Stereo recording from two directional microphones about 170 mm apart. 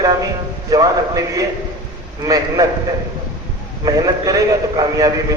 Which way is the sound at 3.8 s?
20° right (ahead or behind).